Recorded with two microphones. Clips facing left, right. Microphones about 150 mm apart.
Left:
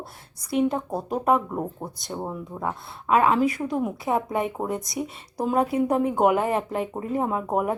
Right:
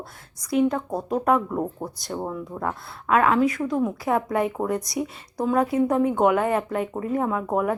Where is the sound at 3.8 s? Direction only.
20° left (ahead or behind).